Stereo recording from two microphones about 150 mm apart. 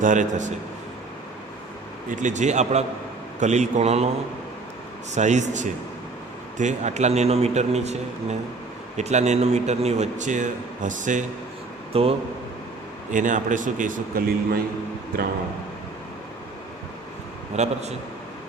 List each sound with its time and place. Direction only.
0.0 s a man's voice: 55° right (ahead or behind)
2.0 s a man's voice: 55° right (ahead or behind)
5.1 s a man's voice: 50° right (ahead or behind)
11.9 s speech: 40° right (ahead or behind)
13.1 s a man's voice: 60° right (ahead or behind)
17.5 s a man's voice: 45° right (ahead or behind)